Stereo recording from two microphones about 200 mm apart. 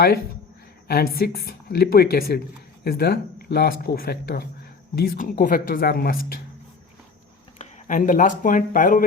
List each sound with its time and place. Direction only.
0.9 s speech: 50° left (ahead or behind)
7.6 s speech: 40° left (ahead or behind)